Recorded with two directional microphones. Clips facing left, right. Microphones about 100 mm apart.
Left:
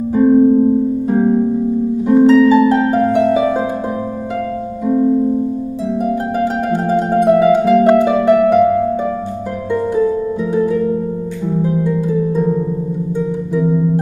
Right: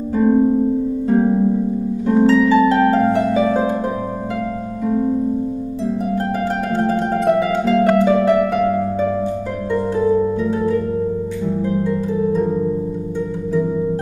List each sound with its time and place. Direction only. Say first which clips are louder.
0.1 s music: left 4 dB; 5° left (ahead or behind)
1.0 s harp: right 2 dB; 5° left (ahead or behind)
5.9 s music: left 3 dB; 15° left (ahead or behind)